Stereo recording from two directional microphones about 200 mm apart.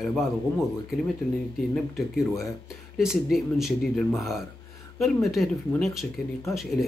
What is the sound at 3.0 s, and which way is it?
Speech, centre (ahead or behind).